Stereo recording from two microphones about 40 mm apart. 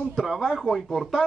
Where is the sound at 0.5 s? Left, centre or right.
Centre.